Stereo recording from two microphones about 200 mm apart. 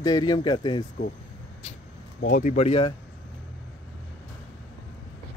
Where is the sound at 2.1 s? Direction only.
45° left (ahead or behind); by 2.9 s 30° left (ahead or behind).